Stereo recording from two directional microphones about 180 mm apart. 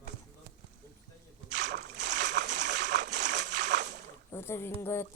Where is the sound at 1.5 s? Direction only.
70° right (ahead or behind).